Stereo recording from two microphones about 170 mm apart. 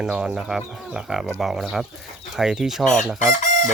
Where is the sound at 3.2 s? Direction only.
45° left (ahead or behind).